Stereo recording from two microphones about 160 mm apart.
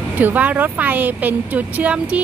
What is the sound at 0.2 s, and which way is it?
Speech, 10° right (ahead or behind).